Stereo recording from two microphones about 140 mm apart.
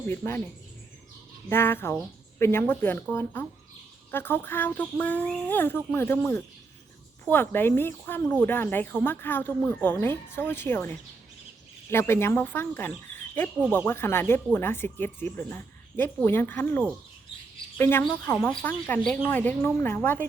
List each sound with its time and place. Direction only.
0.1 s speech: 15° left (ahead or behind)
1.5 s speech: 15° left (ahead or behind)